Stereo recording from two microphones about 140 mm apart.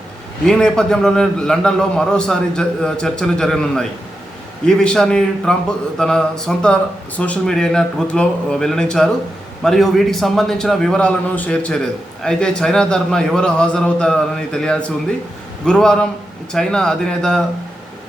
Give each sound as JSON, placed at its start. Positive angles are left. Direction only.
{"t": 0.4, "sound": "a man's voice", "side_deg": 5}